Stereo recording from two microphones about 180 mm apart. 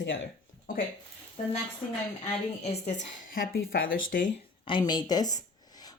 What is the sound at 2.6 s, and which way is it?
A woman's voice, 40° left (ahead or behind).